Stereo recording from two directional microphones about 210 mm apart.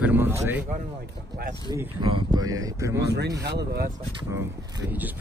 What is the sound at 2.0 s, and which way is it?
Speech, 20° right (ahead or behind).